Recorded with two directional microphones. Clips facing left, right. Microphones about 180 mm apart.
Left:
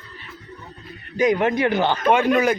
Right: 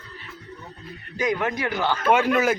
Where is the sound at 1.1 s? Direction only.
20° left (ahead or behind).